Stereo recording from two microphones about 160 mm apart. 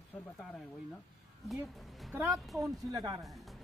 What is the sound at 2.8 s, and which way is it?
Speech, 20° right (ahead or behind).